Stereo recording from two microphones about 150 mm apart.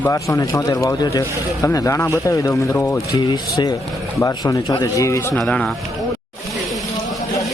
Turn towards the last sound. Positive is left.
turn(degrees=5)  # may be behind; listen again after turning